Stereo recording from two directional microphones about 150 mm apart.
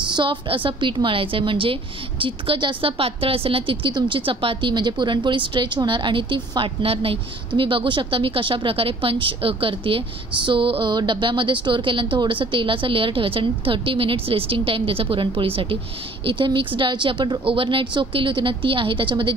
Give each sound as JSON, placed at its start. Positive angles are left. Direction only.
{"t": 0.1, "sound": "a woman's voice", "side_deg": -30}